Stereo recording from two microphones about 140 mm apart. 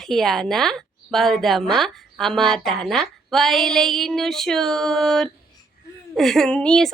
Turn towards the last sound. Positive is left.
turn(degrees=5)  # may be behind; listen again after turning